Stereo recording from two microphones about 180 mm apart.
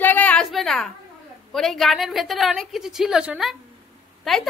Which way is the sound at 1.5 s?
Centre (ahead or behind).